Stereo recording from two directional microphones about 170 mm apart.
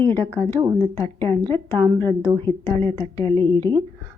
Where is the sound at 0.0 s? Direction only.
10° left (ahead or behind).